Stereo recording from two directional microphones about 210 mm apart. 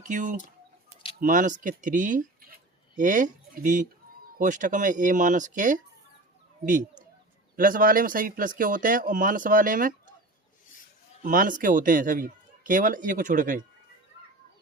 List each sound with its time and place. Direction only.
0.0 s speech: 40° right (ahead or behind)
7.5 s speech: 40° right (ahead or behind)
11.2 s speech: 40° right (ahead or behind)